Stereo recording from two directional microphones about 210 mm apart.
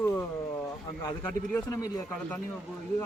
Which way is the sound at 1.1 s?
15° left (ahead or behind).